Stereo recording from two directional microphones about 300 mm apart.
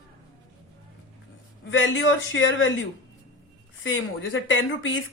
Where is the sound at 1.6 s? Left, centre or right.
Left.